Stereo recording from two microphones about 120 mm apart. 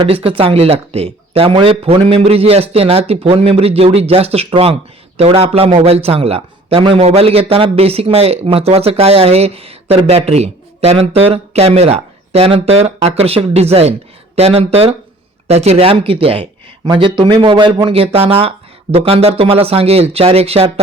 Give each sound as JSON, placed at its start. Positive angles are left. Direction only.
{"t": 0.0, "sound": "a man's voice", "side_deg": -50}
{"t": 16.8, "sound": "a man's voice", "side_deg": -40}